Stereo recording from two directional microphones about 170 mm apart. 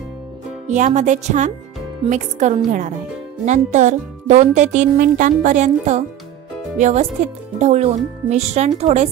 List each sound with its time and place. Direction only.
0.7 s speech: 45° right (ahead or behind)